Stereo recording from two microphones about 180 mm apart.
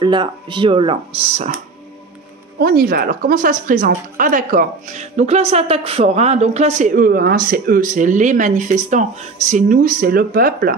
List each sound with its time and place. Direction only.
0.0 s speech: 25° right (ahead or behind)
2.6 s a woman's voice: 55° right (ahead or behind)